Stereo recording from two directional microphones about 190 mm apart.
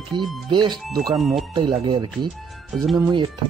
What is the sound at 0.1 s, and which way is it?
Speech, 25° right (ahead or behind).